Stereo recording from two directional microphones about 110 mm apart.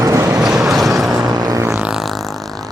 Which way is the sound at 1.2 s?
40° right (ahead or behind).